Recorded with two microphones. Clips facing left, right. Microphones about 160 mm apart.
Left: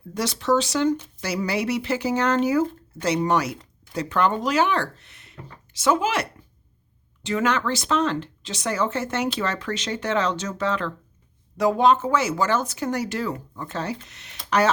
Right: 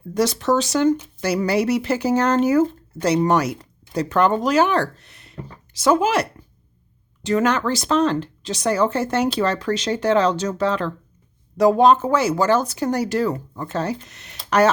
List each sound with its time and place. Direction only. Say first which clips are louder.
0.1 s speech: right 3 dB; 45° right (ahead or behind)